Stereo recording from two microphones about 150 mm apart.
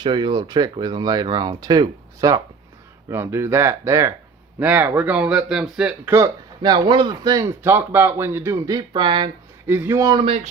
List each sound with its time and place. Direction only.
0.0 s speech: 30° right (ahead or behind); by 6.1 s 5° right (ahead or behind)
6.1 s speech: 25° right (ahead or behind)
7.6 s speech: 15° right (ahead or behind); by 9.3 s 30° right (ahead or behind)
9.6 s speech: 15° right (ahead or behind)
10.2 s speech: 40° right (ahead or behind)